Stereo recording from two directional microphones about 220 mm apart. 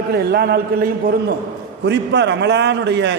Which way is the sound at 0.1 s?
45° right (ahead or behind).